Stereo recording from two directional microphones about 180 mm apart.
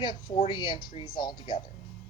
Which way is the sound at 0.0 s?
25° left (ahead or behind).